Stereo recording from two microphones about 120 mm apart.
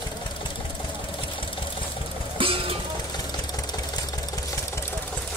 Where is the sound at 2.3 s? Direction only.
50° right (ahead or behind).